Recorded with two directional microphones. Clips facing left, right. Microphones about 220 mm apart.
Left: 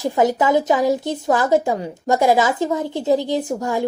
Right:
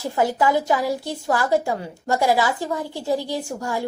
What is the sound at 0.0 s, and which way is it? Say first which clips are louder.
A woman's voice: left 3 dB; 20° left (ahead or behind).